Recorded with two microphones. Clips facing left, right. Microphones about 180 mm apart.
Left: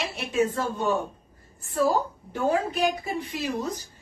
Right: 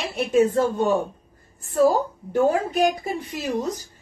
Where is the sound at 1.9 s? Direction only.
45° right (ahead or behind).